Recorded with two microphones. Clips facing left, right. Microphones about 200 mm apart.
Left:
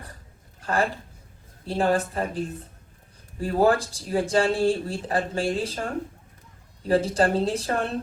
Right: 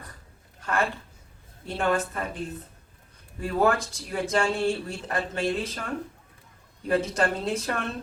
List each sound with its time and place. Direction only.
0.6 s a woman's voice: 35° left (ahead or behind)
3.4 s a woman's voice: 35° left (ahead or behind)